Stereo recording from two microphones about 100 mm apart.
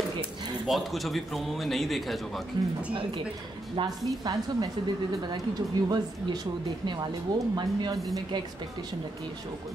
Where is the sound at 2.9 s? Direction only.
60° right (ahead or behind); by 4.7 s 40° right (ahead or behind).